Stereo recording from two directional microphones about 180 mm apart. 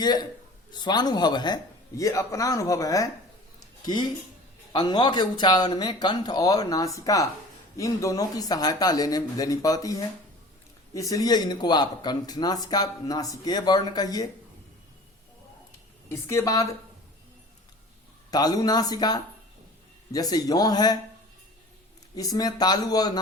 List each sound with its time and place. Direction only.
0.0 s speech: 25° left (ahead or behind)
4.7 s speech: 25° left (ahead or behind)
16.0 s speech: 15° left (ahead or behind)
18.3 s speech: 20° left (ahead or behind)
22.1 s speech: 20° left (ahead or behind)